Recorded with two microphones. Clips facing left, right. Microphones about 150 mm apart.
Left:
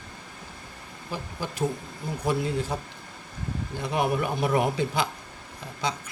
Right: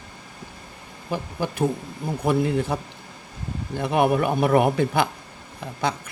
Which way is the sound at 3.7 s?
60° right (ahead or behind).